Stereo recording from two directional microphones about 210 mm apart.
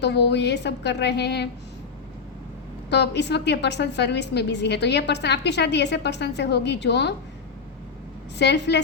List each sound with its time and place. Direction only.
0.0 s a woman's voice: 55° left (ahead or behind)
2.9 s a woman's voice: 55° left (ahead or behind)
8.4 s a woman's voice: 55° left (ahead or behind)